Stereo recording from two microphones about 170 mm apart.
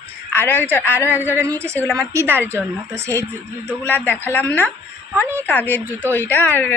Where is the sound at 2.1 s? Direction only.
10° right (ahead or behind).